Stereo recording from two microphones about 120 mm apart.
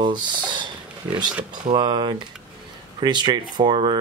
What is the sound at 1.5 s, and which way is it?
Speech, 40° right (ahead or behind).